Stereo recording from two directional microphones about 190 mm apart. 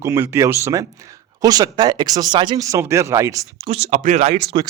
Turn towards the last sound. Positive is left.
turn(degrees=-25)  # may be behind; listen again after turning